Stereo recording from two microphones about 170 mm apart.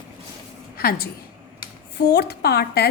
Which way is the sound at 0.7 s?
60° left (ahead or behind).